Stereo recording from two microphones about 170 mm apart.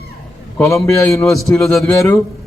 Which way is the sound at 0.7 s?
15° left (ahead or behind).